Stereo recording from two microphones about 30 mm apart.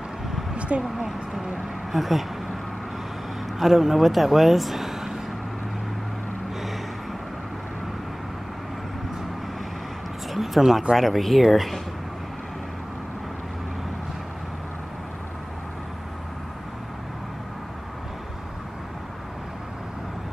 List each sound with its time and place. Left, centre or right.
0.6 s a sound: right
0.9 s speech: centre
1.9 s speech: centre
3.5 s speech: centre
10.3 s a sound: centre
11.0 s speech: centre